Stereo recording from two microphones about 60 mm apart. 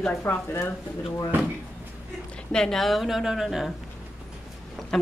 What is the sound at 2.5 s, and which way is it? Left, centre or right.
Speech, centre.